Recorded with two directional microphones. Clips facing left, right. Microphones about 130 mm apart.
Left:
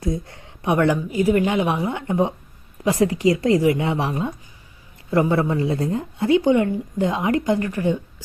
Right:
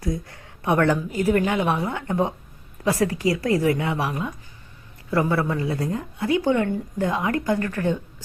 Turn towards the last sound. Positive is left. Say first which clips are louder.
# left 2 dB
turn(degrees=15)  # may be behind; listen again after turning